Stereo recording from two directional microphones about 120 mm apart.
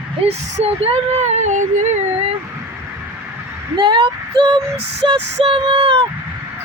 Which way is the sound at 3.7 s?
35° right (ahead or behind).